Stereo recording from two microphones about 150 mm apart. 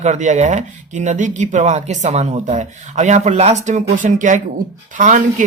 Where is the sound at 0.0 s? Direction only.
50° right (ahead or behind).